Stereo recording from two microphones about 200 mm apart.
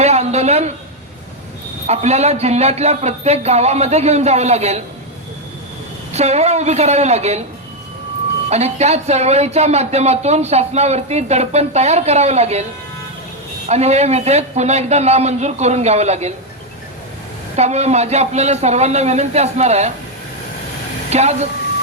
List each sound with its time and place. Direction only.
0.0 s a sound: 35° right (ahead or behind)
1.9 s speech: 35° right (ahead or behind)
6.1 s speech: 30° right (ahead or behind)
8.4 s speech: 35° right (ahead or behind)
13.7 s speech: 35° right (ahead or behind)
17.6 s speech: 35° right (ahead or behind)
21.1 s speech: 35° right (ahead or behind)